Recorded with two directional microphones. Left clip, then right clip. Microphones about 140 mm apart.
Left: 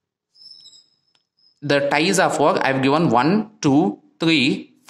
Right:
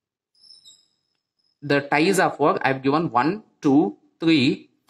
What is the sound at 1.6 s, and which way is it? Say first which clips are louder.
Speech: left 2 dB; 45° left (ahead or behind).